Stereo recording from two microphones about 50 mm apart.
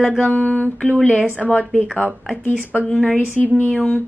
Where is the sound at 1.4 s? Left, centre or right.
Centre.